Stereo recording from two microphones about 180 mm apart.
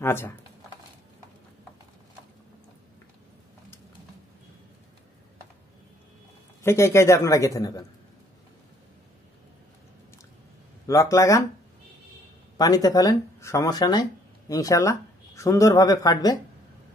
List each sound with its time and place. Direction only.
0.0 s a man's voice: 15° left (ahead or behind)
6.6 s a man's voice: 15° left (ahead or behind)
10.9 s a man's voice: 15° left (ahead or behind)
12.5 s speech: 20° left (ahead or behind)